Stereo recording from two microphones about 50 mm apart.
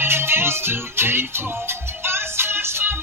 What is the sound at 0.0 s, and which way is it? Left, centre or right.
Music, right.